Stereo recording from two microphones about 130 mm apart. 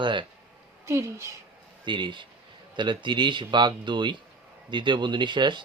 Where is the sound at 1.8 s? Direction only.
40° right (ahead or behind).